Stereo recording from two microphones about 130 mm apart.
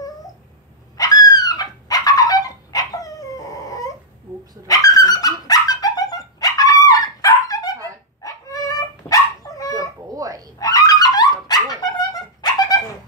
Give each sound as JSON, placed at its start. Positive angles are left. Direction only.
{"t": 0.9, "sound": "a sound", "side_deg": 30}
{"t": 4.6, "sound": "dog", "side_deg": 30}
{"t": 10.1, "sound": "dog", "side_deg": -25}
{"t": 10.6, "sound": "dog", "side_deg": 25}